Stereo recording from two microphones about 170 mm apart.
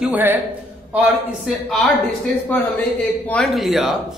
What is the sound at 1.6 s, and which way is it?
Speech, centre (ahead or behind).